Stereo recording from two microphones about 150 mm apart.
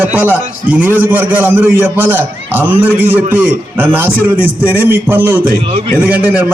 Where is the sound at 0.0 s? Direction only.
15° right (ahead or behind).